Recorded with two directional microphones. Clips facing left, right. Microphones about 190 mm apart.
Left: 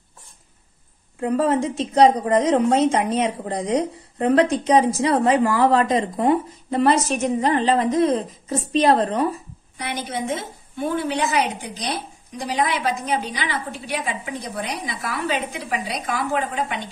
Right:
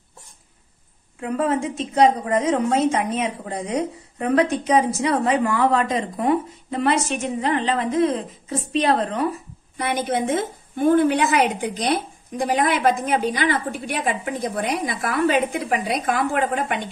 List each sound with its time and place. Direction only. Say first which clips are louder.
1.2 s a woman's voice: left 2 dB; 30° left (ahead or behind)
9.8 s a woman's voice: right 5 dB; 50° right (ahead or behind)